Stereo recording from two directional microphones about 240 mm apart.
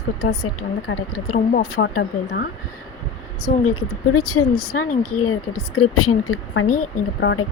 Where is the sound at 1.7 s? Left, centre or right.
Left.